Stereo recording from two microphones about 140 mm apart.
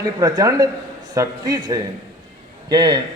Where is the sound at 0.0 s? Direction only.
25° right (ahead or behind).